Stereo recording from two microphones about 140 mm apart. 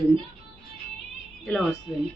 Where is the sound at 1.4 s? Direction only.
5° left (ahead or behind).